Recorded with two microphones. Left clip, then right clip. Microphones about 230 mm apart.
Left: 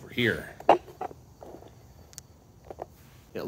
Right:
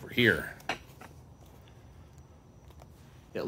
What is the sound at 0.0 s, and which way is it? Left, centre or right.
Drawer open or close, centre.